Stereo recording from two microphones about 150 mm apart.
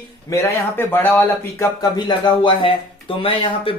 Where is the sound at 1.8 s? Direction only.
30° left (ahead or behind).